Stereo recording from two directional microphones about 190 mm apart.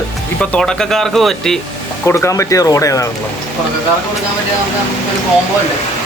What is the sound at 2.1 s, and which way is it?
Speech, 15° left (ahead or behind).